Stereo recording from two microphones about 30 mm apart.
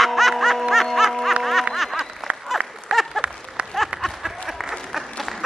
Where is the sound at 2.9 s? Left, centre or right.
Right.